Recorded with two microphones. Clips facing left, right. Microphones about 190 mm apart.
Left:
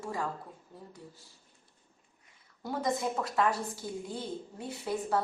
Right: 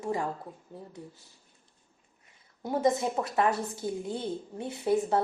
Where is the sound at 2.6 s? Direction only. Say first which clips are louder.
Right 5 dB; 25° right (ahead or behind).